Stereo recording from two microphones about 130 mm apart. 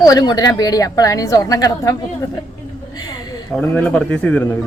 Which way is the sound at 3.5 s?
10° left (ahead or behind).